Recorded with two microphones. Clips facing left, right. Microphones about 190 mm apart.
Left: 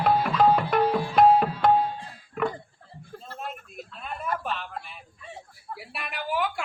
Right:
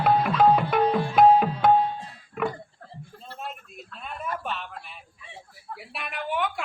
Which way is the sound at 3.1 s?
50° left (ahead or behind).